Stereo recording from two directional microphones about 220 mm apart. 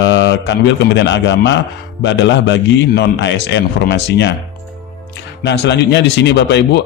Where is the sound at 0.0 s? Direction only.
55° left (ahead or behind).